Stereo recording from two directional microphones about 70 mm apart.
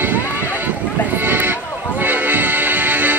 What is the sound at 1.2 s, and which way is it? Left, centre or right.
Music, right.